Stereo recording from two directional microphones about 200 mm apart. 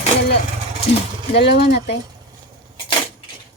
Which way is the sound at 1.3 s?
55° left (ahead or behind).